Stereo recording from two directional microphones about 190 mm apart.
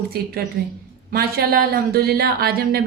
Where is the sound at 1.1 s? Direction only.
50° right (ahead or behind).